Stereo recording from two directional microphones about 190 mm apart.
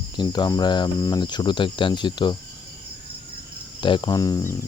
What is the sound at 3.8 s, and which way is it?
Speech, 25° left (ahead or behind).